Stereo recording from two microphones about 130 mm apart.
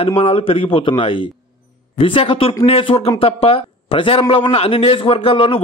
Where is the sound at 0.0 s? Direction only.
45° left (ahead or behind).